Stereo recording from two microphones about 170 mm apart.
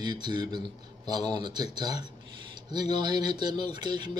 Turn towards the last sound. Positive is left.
turn(degrees=-25)  # may be behind; listen again after turning